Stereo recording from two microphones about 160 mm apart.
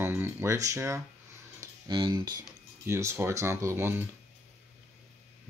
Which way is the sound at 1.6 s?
30° right (ahead or behind).